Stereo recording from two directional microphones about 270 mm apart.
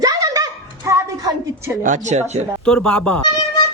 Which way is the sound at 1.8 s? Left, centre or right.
Right.